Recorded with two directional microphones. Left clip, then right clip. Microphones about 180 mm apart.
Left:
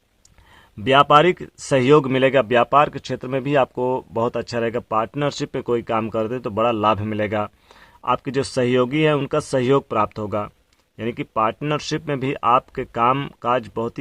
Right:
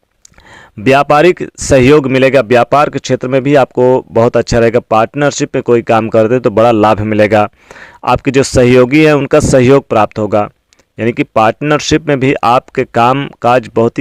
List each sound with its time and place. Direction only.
0.5 s speech: 40° right (ahead or behind)